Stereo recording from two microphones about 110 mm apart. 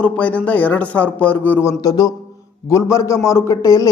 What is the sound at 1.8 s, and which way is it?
A man's voice, 35° left (ahead or behind).